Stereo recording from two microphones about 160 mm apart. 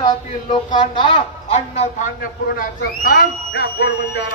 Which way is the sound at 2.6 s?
75° left (ahead or behind).